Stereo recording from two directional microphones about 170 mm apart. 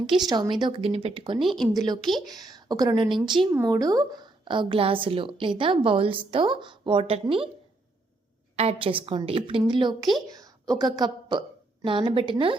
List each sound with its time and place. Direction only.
0.3 s a woman's voice: 25° right (ahead or behind)
1.4 s speech: centre (ahead or behind)
1.7 s a woman's voice: 20° right (ahead or behind)
8.5 s a woman's voice: 35° right (ahead or behind)